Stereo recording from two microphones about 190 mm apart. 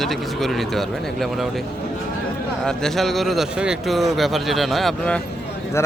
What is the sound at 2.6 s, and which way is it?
Speech, centre (ahead or behind).